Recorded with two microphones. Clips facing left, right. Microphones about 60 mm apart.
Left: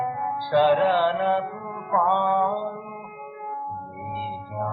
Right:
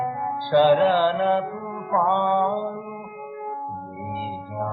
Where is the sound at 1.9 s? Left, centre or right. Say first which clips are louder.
Even; centre.